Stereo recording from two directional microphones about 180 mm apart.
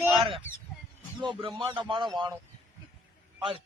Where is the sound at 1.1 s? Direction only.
25° right (ahead or behind).